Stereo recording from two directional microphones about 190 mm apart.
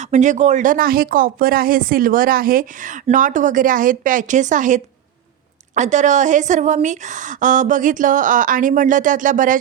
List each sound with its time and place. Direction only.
0.0 s speech: 40° right (ahead or behind)